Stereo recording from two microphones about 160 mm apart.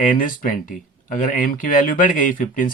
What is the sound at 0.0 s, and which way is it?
Speech, 55° left (ahead or behind).